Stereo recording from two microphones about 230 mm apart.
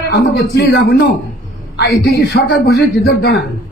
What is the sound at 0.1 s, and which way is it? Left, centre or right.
A man's voice, left.